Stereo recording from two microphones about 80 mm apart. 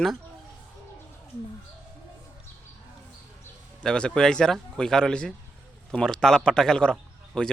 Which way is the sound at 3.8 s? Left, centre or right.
Centre.